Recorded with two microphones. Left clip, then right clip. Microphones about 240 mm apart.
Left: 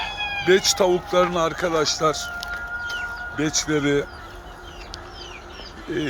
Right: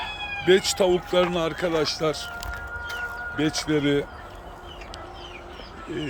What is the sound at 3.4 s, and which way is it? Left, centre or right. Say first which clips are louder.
Speech: left 2 dB; centre.